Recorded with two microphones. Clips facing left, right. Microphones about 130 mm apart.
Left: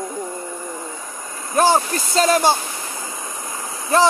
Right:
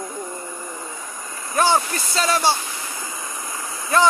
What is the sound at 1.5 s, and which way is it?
Speech, 40° left (ahead or behind).